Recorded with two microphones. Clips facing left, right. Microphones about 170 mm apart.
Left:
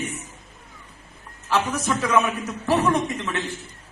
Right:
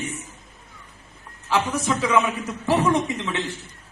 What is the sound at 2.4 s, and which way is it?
Speech, 15° right (ahead or behind).